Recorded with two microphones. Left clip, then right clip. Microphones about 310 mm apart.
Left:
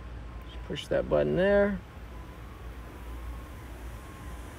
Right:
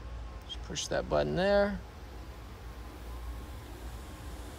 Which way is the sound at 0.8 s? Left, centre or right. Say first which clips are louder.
Left 4 dB; centre.